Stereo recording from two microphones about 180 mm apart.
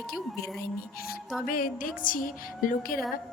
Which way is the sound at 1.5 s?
50° left (ahead or behind).